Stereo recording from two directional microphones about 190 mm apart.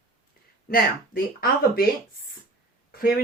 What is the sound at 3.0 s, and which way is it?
Speech, 50° left (ahead or behind).